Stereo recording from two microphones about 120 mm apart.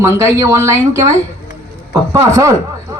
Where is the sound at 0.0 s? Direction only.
25° right (ahead or behind).